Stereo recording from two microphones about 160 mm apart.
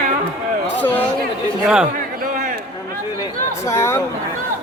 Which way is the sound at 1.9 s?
60° right (ahead or behind).